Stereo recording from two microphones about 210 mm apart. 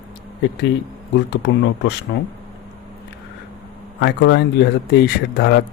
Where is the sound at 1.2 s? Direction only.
55° left (ahead or behind).